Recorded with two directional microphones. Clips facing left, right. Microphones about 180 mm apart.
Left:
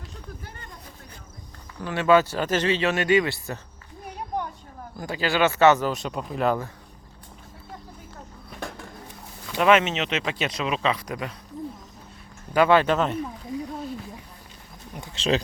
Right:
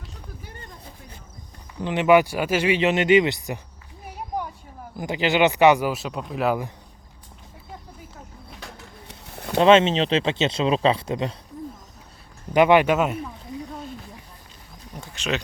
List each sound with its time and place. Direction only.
1.8 s speech: 20° right (ahead or behind)
4.0 s a sound: 5° right (ahead or behind)
4.9 s speech: 20° right (ahead or behind)
8.6 s a sound: 50° left (ahead or behind)
9.0 s bird: 65° right (ahead or behind)
9.6 s speech: 30° right (ahead or behind)
12.5 s speech: 15° right (ahead or behind)
14.9 s pigeon: 15° left (ahead or behind)